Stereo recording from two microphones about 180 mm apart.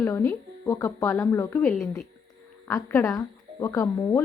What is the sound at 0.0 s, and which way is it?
A woman's voice, 15° left (ahead or behind).